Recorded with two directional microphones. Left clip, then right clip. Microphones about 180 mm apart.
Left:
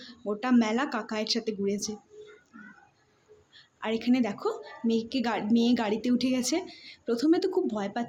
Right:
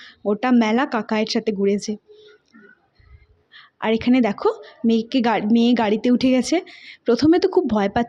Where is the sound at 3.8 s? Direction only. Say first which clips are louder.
Right 9 dB; 45° right (ahead or behind).